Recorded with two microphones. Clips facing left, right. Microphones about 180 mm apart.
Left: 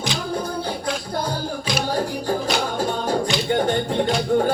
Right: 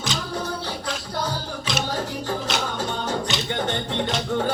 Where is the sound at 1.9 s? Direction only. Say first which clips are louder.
Left 4 dB; 40° left (ahead or behind).